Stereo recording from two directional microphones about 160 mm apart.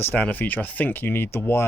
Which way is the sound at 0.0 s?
10° left (ahead or behind).